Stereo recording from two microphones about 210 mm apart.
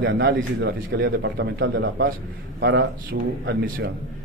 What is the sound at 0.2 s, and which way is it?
A man's voice, 55° right (ahead or behind).